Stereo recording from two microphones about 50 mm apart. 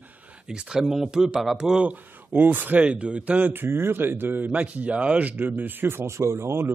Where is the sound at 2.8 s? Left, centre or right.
Right.